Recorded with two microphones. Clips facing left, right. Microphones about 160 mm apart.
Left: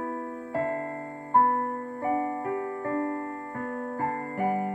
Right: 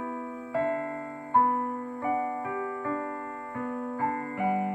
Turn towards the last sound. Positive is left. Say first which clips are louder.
# even
turn(degrees=40)  # may be behind; listen again after turning